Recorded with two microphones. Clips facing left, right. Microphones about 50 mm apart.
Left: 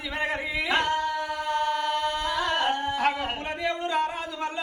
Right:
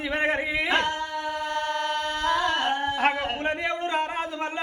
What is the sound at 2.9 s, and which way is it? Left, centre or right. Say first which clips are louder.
A man's voice: right 1 dB; right.